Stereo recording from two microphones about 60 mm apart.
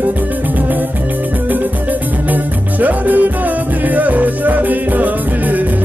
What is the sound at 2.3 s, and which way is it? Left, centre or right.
Music, right.